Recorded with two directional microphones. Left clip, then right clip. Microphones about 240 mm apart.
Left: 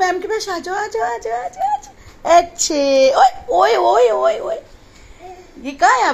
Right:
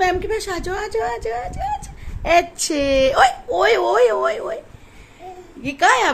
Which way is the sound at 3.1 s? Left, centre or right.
Centre.